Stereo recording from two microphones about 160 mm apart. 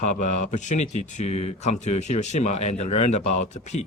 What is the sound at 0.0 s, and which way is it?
Speech, 45° left (ahead or behind).